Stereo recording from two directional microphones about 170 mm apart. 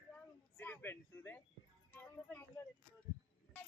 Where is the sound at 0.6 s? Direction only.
10° left (ahead or behind).